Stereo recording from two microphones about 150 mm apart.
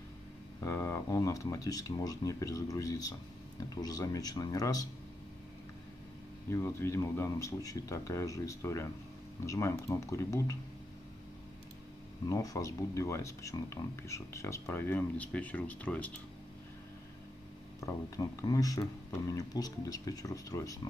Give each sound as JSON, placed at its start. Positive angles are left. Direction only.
{"t": 0.6, "sound": "speech", "side_deg": 20}
{"t": 6.5, "sound": "speech", "side_deg": 20}
{"t": 12.3, "sound": "speech", "side_deg": 20}
{"t": 17.7, "sound": "speech", "side_deg": 20}